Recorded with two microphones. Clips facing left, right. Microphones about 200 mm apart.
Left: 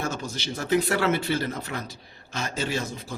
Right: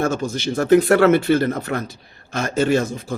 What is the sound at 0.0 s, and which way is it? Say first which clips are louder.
A man's voice: right 10 dB; 50° right (ahead or behind).